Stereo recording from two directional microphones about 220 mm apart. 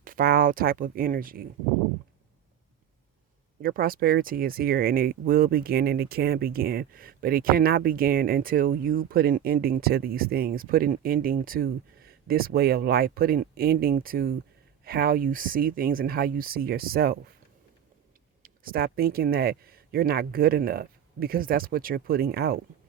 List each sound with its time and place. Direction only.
0.0 s speech: 40° right (ahead or behind)
3.6 s speech: 40° right (ahead or behind)
18.4 s speech: 40° right (ahead or behind)